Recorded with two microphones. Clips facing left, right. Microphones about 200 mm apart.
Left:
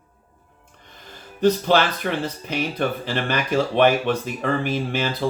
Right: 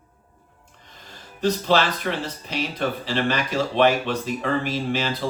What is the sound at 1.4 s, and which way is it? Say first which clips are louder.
Speech: left 3 dB; 55° left (ahead or behind).